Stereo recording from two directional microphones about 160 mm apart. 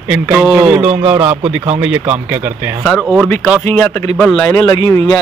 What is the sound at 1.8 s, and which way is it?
Speech, 10° right (ahead or behind).